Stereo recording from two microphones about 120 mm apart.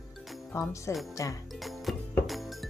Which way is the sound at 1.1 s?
25° left (ahead or behind).